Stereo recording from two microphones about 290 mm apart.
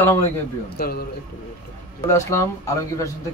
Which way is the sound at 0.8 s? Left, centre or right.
Left.